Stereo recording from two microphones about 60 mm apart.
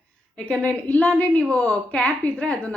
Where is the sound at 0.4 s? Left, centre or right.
Centre.